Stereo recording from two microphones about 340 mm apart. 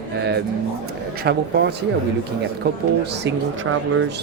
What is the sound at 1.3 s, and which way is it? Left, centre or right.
Speech, right.